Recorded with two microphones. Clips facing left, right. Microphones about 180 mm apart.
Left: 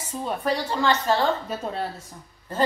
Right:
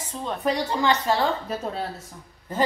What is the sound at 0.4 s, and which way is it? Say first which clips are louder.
Speech: right 2 dB; 15° right (ahead or behind).